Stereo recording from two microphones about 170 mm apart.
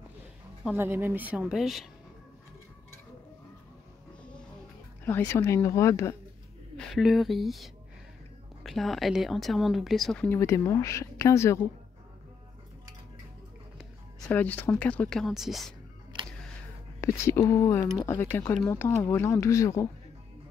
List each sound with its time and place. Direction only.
0.7 s a woman's voice: 10° right (ahead or behind)
5.0 s speech: 15° left (ahead or behind)
6.8 s speech: centre (ahead or behind)
10.4 s speech: 20° left (ahead or behind)
14.3 s speech: 10° left (ahead or behind)
17.0 s speech: 15° left (ahead or behind)